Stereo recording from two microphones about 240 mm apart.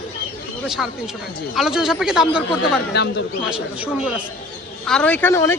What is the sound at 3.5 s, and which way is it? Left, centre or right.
Speech, centre.